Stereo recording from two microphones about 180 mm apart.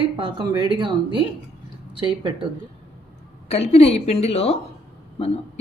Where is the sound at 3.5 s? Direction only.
35° left (ahead or behind).